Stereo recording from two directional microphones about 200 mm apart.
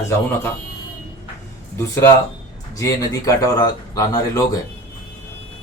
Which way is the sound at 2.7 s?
15° left (ahead or behind).